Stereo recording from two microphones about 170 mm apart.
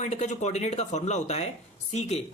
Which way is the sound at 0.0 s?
45° left (ahead or behind).